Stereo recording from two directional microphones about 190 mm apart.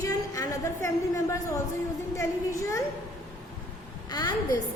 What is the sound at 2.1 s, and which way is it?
Speech, 15° left (ahead or behind).